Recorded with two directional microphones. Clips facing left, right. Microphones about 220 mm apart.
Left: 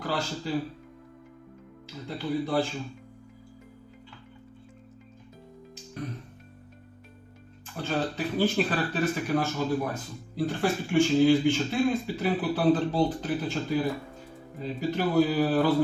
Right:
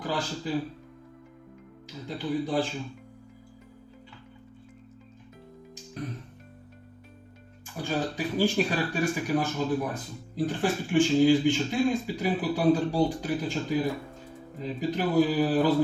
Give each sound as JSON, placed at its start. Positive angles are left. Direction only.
{"t": 0.0, "sound": "speech", "side_deg": -15}
{"t": 2.0, "sound": "speech", "side_deg": -15}
{"t": 7.8, "sound": "speech", "side_deg": -15}
{"t": 14.8, "sound": "speech", "side_deg": -15}